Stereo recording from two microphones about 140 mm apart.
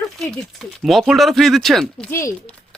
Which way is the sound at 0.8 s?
Centre (ahead or behind).